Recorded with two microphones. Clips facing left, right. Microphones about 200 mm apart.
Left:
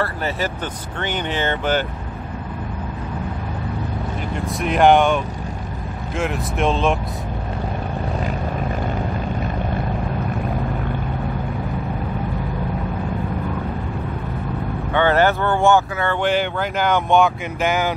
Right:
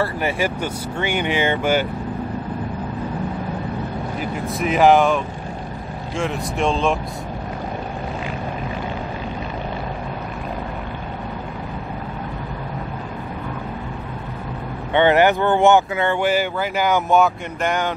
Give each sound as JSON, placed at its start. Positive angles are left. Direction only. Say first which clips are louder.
{"t": 0.0, "sound": "speech", "louder": "right 2 dB", "side_deg": -15}
{"t": 4.6, "sound": "speech", "louder": "even", "side_deg": 0}
{"t": 15.0, "sound": "speech", "louder": "right 2 dB", "side_deg": -15}
{"t": 16.2, "sound": "speech", "louder": "even", "side_deg": -5}